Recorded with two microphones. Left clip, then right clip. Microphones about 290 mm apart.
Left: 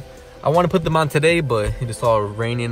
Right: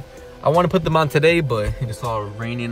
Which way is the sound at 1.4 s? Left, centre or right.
Left.